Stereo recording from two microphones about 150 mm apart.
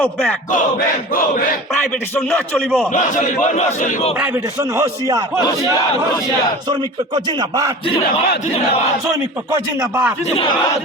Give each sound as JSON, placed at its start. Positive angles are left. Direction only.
{"t": 0.0, "sound": "speech", "side_deg": 10}
{"t": 2.9, "sound": "a man's voice", "side_deg": 55}
{"t": 4.8, "sound": "a man's voice", "side_deg": -25}
{"t": 7.3, "sound": "a man's voice", "side_deg": -25}
{"t": 9.5, "sound": "speech", "side_deg": -15}